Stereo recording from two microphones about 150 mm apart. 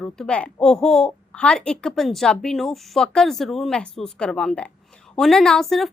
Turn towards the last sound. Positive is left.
turn(degrees=0)  # may be behind; listen again after turning